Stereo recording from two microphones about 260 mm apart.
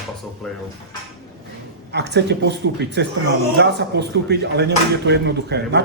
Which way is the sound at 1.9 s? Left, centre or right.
Right.